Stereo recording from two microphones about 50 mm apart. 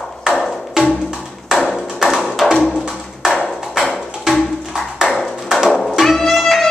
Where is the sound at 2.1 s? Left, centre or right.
Centre.